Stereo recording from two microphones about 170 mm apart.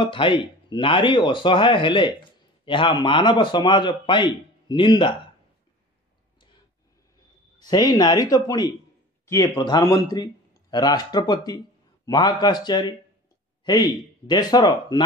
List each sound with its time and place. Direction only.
0.0 s speech: 30° left (ahead or behind)
7.6 s speech: 25° left (ahead or behind)